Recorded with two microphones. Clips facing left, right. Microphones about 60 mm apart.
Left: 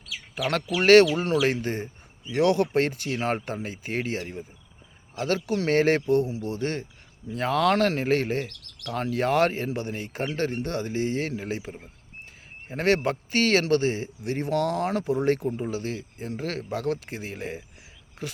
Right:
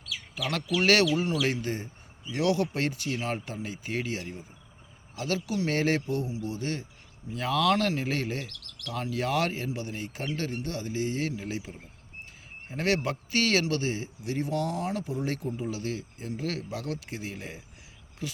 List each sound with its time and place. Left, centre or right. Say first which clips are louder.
0.8 s speech: left 7 dB; left
12.7 s speech: left 5 dB; left
14.5 s speech: left 7 dB; left
14.9 s speech: left 8 dB; left
15.4 s speech: left 4 dB; left